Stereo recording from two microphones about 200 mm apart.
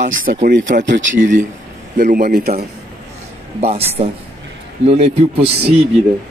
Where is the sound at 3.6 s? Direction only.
30° right (ahead or behind).